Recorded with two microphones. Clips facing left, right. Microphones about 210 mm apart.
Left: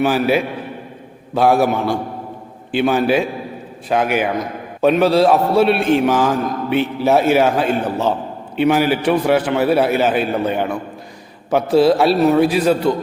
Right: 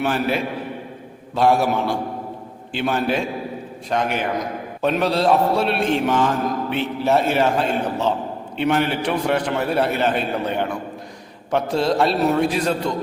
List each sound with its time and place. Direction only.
0.0 s a man's voice: 5° left (ahead or behind)